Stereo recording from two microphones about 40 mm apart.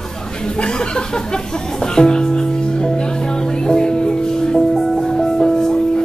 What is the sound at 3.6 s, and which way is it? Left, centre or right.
Music, left.